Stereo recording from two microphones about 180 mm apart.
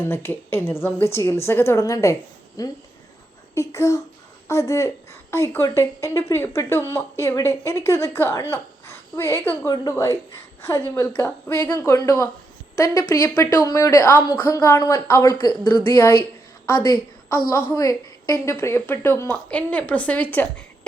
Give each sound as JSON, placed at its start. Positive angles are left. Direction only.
{"t": 0.0, "sound": "a woman's voice", "side_deg": 10}